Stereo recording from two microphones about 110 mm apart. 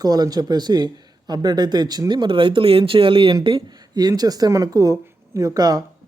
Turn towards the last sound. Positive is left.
turn(degrees=-35)  # may be behind; listen again after turning